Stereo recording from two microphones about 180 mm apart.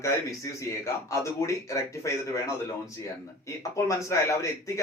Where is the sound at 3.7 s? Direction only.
15° left (ahead or behind).